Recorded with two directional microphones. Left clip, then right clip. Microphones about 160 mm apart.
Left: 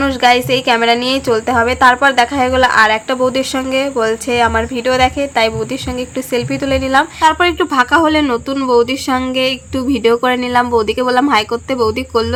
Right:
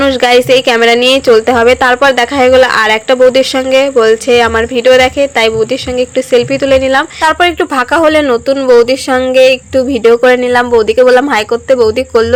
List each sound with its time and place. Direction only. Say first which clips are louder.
0.0 s a woman's voice: right 4 dB; 25° right (ahead or behind)